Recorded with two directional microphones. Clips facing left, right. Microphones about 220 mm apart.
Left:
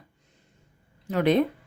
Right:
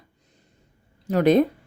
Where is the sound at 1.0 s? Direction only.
40° right (ahead or behind).